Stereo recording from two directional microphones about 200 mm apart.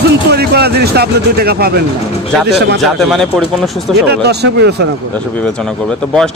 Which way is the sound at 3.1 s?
Centre (ahead or behind).